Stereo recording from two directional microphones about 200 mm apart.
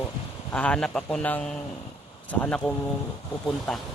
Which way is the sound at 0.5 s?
5° left (ahead or behind).